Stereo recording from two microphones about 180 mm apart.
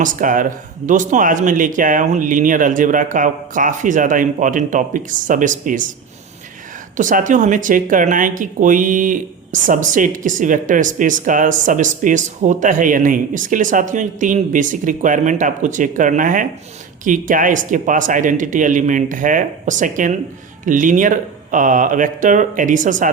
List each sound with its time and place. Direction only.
0.0 s speech: 50° right (ahead or behind)
6.9 s speech: 45° right (ahead or behind)